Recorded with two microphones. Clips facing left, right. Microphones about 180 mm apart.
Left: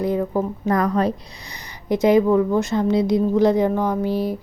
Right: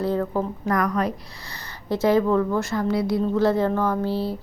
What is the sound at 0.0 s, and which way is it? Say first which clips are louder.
Speech: left 2 dB; 15° left (ahead or behind).